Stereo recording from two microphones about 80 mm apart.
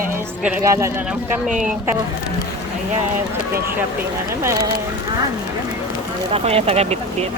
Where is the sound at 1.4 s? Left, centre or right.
Centre.